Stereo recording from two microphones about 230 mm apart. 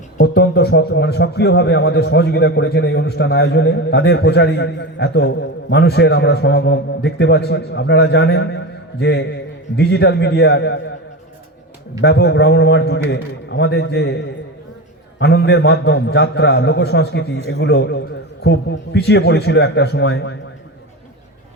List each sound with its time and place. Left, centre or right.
0.2 s a man's voice: left
12.0 s a man's voice: left
15.2 s a man's voice: left